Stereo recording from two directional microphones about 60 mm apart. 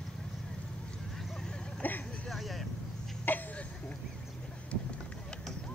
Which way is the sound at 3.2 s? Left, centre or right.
Left.